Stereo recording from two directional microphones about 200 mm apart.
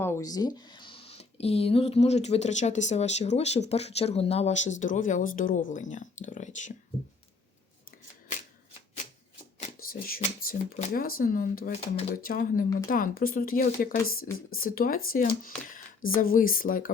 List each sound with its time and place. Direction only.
0.0 s speech: 15° left (ahead or behind); by 6.7 s 40° left (ahead or behind)
10.2 s speech: 40° left (ahead or behind)